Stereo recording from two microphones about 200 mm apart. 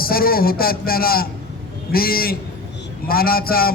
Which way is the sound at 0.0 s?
50° left (ahead or behind).